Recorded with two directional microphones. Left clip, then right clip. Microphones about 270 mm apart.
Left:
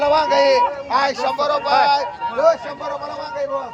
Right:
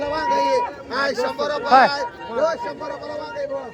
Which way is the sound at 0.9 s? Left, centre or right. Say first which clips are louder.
Left 4 dB; centre.